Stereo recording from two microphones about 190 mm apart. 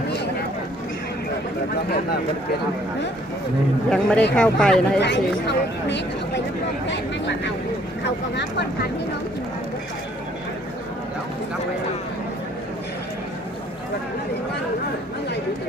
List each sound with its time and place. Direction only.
3.8 s speech: 5° left (ahead or behind)
4.9 s speech: 65° left (ahead or behind)